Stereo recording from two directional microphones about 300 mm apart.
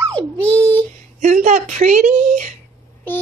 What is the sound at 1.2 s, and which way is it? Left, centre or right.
A woman's voice, right.